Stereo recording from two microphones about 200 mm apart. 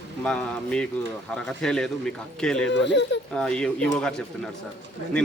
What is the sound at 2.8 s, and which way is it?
Speech, 60° left (ahead or behind).